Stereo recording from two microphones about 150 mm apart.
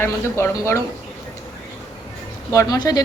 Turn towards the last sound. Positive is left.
turn(degrees=25)  # may be behind; listen again after turning